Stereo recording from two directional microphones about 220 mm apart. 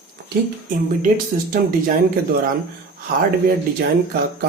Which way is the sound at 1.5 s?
40° right (ahead or behind).